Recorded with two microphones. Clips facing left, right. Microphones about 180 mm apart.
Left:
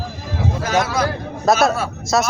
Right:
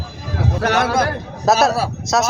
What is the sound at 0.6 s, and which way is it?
Speech, 65° right (ahead or behind).